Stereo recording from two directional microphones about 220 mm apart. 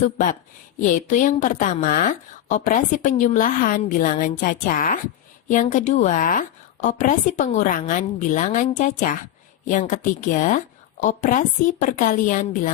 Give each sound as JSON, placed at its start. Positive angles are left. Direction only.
{"t": 0.0, "sound": "a woman's voice", "side_deg": 35}